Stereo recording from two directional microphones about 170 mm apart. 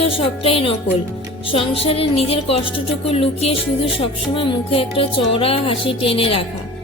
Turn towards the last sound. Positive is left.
turn(degrees=35)  # may be behind; listen again after turning